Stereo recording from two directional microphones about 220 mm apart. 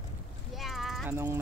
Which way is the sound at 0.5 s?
Centre (ahead or behind).